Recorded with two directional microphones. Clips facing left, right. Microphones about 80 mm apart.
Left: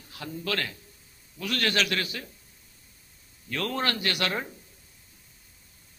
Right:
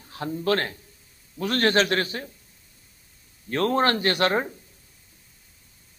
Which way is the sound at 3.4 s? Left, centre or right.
Right.